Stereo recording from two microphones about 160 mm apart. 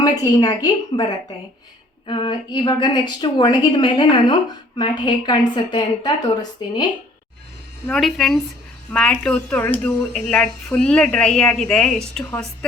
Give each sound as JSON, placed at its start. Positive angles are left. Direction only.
{"t": 0.0, "sound": "a woman's voice", "side_deg": 25}
{"t": 2.0, "sound": "a woman's voice", "side_deg": 30}
{"t": 7.9, "sound": "speech", "side_deg": 0}